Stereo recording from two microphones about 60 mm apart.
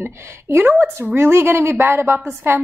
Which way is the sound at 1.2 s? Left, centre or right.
Right.